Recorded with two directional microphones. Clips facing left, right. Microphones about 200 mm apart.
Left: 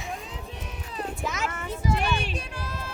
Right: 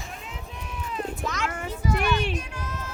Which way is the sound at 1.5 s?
55° right (ahead or behind).